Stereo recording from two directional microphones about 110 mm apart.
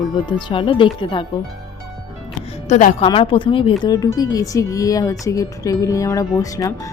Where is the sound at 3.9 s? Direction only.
35° left (ahead or behind).